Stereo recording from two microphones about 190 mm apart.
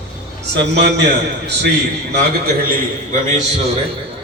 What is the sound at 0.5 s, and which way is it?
Speech, 65° right (ahead or behind).